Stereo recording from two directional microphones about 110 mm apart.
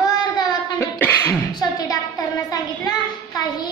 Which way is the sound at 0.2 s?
40° left (ahead or behind).